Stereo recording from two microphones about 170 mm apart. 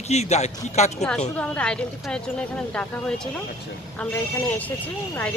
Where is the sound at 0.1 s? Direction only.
40° left (ahead or behind).